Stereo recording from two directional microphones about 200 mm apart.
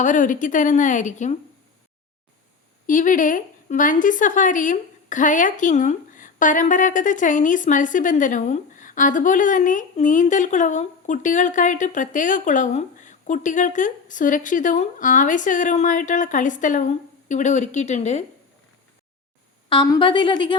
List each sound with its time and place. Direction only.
0.0 s a woman's voice: 40° left (ahead or behind)
2.8 s a woman's voice: 40° left (ahead or behind)
19.7 s a woman's voice: 20° left (ahead or behind)